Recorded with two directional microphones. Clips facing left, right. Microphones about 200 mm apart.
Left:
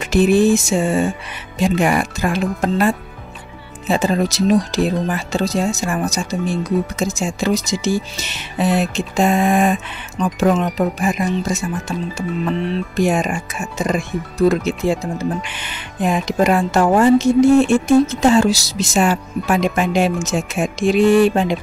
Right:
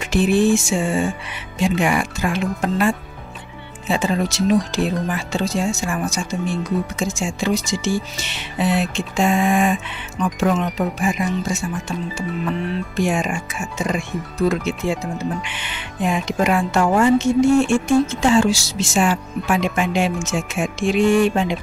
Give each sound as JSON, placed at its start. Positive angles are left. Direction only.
{"t": 0.0, "sound": "speech", "side_deg": 40}